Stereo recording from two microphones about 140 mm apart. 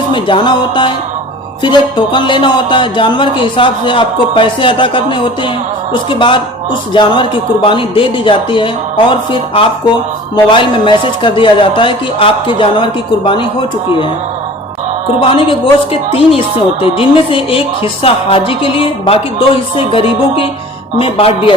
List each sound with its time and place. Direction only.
0.1 s a woman's voice: 35° left (ahead or behind)
5.9 s a woman's voice: 35° left (ahead or behind)
15.4 s a woman's voice: 40° left (ahead or behind)